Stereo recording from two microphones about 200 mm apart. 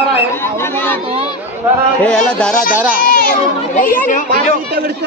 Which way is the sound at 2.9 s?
45° left (ahead or behind).